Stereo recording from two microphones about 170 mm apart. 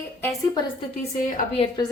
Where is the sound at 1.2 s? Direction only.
50° left (ahead or behind).